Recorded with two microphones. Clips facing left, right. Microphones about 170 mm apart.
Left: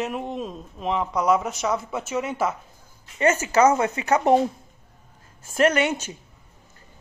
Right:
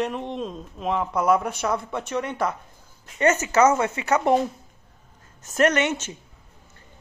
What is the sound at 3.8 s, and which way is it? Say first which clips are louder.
Speech: left 1 dB; 35° left (ahead or behind).